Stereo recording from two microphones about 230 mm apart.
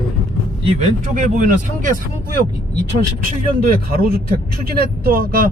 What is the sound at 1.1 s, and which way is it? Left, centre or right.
Speech, right.